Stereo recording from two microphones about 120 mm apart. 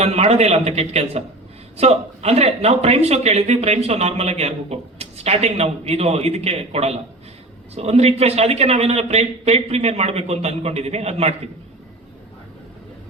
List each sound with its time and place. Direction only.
0.0 s a man's voice: 60° right (ahead or behind)